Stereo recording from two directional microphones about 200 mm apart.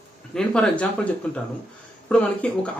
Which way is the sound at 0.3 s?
5° left (ahead or behind).